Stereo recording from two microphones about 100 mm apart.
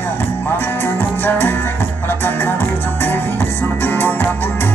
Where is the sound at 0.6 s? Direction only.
20° left (ahead or behind).